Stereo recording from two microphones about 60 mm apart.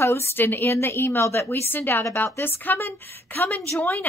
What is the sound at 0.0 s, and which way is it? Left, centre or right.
Speech, left.